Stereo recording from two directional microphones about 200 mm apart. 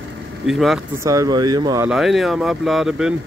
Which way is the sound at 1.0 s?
15° right (ahead or behind).